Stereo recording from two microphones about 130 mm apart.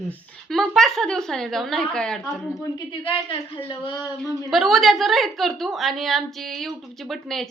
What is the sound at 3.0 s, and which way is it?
Speech, 45° left (ahead or behind).